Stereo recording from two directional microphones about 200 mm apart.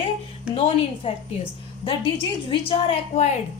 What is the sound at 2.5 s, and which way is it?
Speech, 30° left (ahead or behind).